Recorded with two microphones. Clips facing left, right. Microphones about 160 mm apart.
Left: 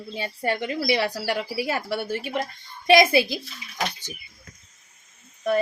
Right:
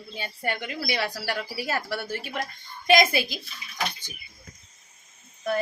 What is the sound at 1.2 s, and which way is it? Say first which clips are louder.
Speech: left 4 dB; 20° left (ahead or behind).